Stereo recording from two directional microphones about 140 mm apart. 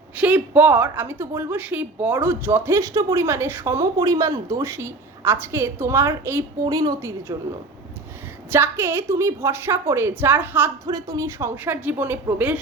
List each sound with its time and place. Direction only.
0.2 s a woman's voice: 10° right (ahead or behind)
8.5 s a woman's voice: 15° right (ahead or behind)
10.8 s a woman's voice: 25° right (ahead or behind)